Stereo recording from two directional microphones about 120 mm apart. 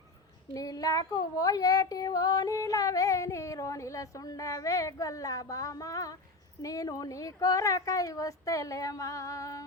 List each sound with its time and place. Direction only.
0.5 s speech: 30° left (ahead or behind)